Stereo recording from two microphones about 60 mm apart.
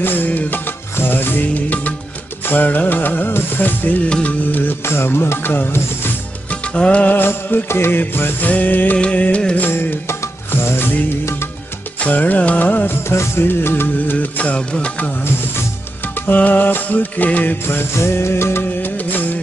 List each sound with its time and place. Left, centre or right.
0.0 s music: left
4.8 s music: left
6.5 s music: centre
7.2 s music: left
8.0 s music: left
8.9 s music: left
9.6 s music: left
12.0 s music: left
13.1 s music: left
14.1 s music: left
16.2 s music: left
17.6 s music of bollywood: left